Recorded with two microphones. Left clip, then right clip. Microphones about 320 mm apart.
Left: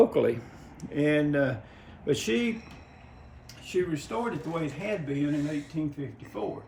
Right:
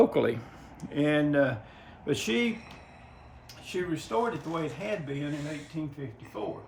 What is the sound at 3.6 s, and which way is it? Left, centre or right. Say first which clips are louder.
Speech: left 3 dB; centre.